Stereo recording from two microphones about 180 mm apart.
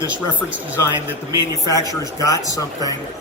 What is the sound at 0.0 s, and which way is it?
A man's voice, 15° left (ahead or behind).